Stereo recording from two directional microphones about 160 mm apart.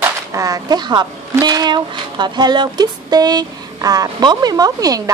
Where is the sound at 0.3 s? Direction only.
20° right (ahead or behind).